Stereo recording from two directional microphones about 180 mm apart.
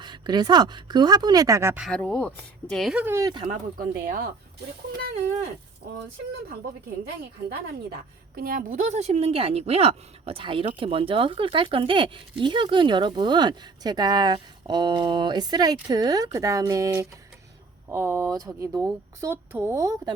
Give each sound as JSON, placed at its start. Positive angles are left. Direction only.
{"t": 0.0, "sound": "speech", "side_deg": -25}
{"t": 1.8, "sound": "speech", "side_deg": 5}
{"t": 3.5, "sound": "speech", "side_deg": -50}
{"t": 7.5, "sound": "speech", "side_deg": -60}